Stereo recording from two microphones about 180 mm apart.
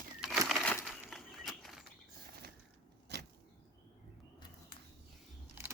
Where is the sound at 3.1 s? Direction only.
70° right (ahead or behind).